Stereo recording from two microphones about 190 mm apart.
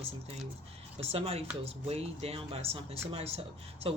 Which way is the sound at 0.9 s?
30° right (ahead or behind).